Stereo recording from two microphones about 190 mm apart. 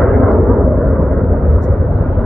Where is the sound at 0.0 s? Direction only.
Centre (ahead or behind).